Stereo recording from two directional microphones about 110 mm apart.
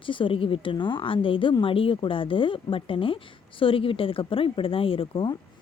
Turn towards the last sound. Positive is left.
turn(degrees=55)  # may be behind; listen again after turning